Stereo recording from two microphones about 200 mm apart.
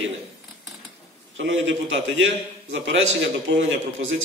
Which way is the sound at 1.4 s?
65° right (ahead or behind).